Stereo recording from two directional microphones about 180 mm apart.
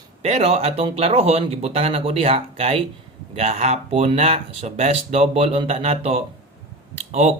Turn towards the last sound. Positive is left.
turn(degrees=-35)  # may be behind; listen again after turning